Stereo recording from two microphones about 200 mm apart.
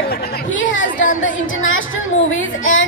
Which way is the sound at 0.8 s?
40° left (ahead or behind).